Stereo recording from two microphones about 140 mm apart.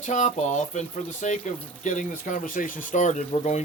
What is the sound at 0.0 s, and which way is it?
A man's voice, 60° left (ahead or behind).